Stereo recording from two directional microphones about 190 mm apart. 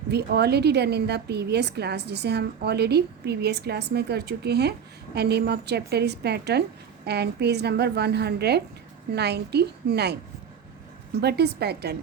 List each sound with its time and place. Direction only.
0.1 s a woman's voice: 60° right (ahead or behind)
11.2 s a woman's voice: 60° right (ahead or behind)